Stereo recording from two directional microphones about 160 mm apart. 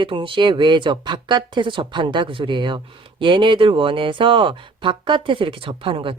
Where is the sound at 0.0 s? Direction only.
30° right (ahead or behind).